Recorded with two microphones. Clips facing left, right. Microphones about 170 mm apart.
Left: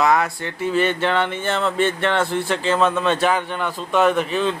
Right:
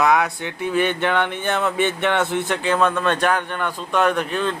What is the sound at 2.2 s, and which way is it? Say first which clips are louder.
Speech: even; 20° right (ahead or behind).